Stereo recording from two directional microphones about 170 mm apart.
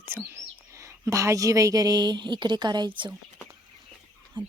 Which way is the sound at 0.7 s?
15° right (ahead or behind).